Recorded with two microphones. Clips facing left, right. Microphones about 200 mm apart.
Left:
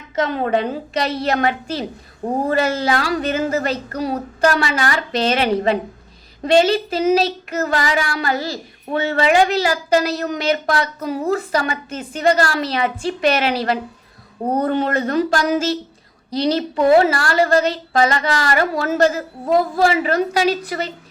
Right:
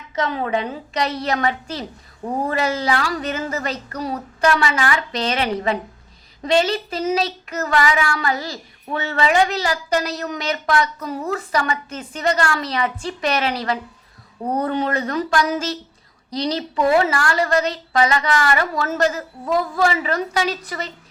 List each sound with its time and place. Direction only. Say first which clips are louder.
0.3 s a woman's voice: left 4 dB; 40° left (ahead or behind)
0.7 s a woman's voice: left 2 dB; 30° left (ahead or behind)